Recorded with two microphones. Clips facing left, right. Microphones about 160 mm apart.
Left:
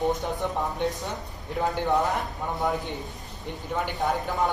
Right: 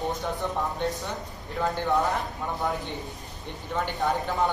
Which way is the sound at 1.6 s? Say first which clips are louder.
Left 1 dB; 20° left (ahead or behind).